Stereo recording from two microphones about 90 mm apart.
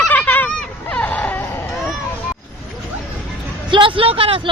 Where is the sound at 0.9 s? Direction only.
15° left (ahead or behind).